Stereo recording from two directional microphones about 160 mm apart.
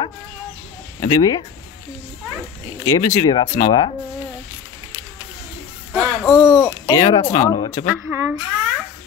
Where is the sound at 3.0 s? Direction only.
30° left (ahead or behind).